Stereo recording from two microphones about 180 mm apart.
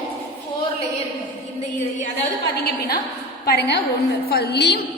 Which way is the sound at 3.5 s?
65° left (ahead or behind).